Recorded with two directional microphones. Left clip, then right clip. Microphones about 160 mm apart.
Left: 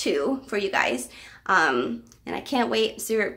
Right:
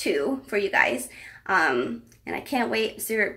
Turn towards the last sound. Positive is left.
turn(degrees=15)  # may be behind; listen again after turning